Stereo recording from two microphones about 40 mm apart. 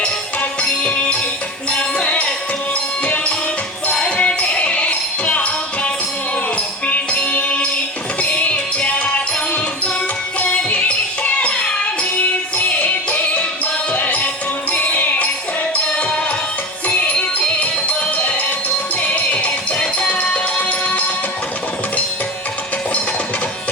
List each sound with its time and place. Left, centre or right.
0.6 s music: left
4.2 s music: left
10.7 s music: left
12.5 s music: left
15.9 s music: left